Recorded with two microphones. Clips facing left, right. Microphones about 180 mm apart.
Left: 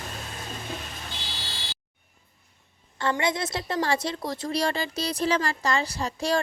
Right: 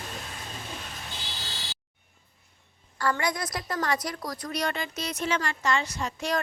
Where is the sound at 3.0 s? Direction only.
25° left (ahead or behind).